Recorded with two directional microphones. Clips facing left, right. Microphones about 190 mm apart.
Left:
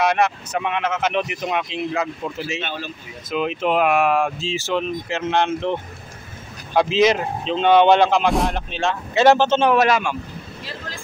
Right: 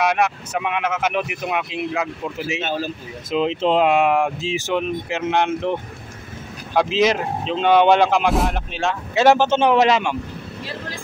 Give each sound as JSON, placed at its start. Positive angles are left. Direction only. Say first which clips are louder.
{"t": 0.0, "sound": "speech", "louder": "left 1 dB", "side_deg": -5}
{"t": 2.6, "sound": "speech", "louder": "right 5 dB", "side_deg": -40}
{"t": 3.3, "sound": "speech", "louder": "right 2 dB", "side_deg": -25}
{"t": 6.7, "sound": "speech", "louder": "left 1 dB", "side_deg": 0}